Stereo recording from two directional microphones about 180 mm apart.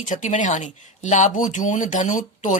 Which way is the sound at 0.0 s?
40° left (ahead or behind).